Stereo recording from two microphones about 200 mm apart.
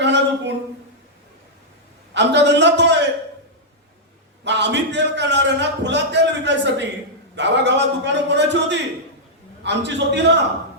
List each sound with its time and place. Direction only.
0.0 s a sound: 60° right (ahead or behind)
2.1 s a man's voice: 60° right (ahead or behind)
4.4 s a man's voice: 60° right (ahead or behind)